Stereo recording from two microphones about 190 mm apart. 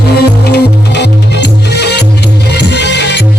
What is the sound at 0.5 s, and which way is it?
Music, 60° left (ahead or behind).